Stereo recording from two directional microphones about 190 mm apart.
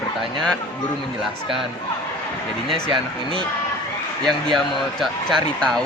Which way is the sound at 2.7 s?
25° right (ahead or behind).